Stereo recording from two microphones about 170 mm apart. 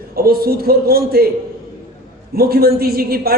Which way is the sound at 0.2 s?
65° right (ahead or behind).